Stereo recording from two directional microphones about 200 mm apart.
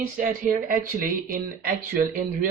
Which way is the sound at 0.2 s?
40° right (ahead or behind).